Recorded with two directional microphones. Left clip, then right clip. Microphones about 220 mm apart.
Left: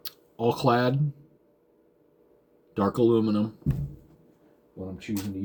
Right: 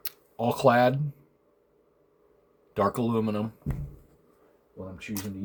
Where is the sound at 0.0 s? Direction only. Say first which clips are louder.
Left 3 dB; 45° right (ahead or behind).